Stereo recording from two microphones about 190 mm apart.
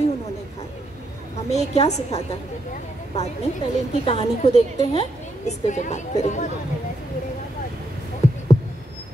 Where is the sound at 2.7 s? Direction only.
35° left (ahead or behind).